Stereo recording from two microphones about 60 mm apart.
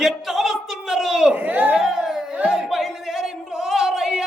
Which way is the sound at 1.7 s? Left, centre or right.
Centre.